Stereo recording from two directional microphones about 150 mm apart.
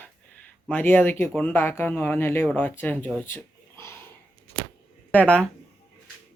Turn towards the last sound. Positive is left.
turn(degrees=10)  # may be behind; listen again after turning